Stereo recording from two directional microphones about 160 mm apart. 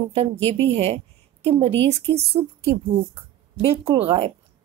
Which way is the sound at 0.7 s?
40° right (ahead or behind).